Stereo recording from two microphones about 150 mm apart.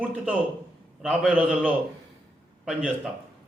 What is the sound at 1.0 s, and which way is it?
Speech, 10° right (ahead or behind).